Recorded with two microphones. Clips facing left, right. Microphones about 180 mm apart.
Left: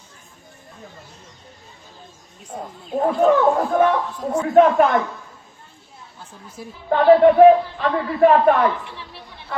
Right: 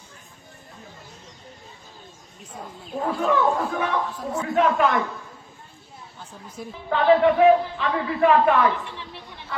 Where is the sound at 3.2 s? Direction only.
50° left (ahead or behind).